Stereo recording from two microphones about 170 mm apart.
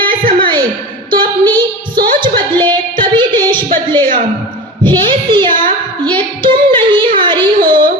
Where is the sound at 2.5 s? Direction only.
30° right (ahead or behind).